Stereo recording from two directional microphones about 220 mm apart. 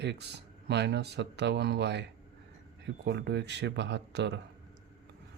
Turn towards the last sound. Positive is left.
turn(degrees=-50)  # may be behind; listen again after turning